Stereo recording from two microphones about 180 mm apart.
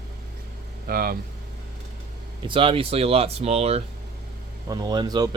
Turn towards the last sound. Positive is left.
turn(degrees=-20)  # may be behind; listen again after turning